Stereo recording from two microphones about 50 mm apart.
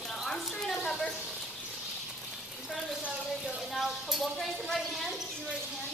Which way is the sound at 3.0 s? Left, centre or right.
Right.